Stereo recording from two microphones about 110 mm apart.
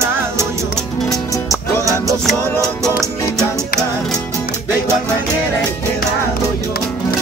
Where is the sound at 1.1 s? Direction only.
30° left (ahead or behind).